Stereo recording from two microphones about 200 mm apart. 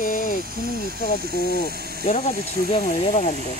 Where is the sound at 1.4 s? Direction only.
50° left (ahead or behind).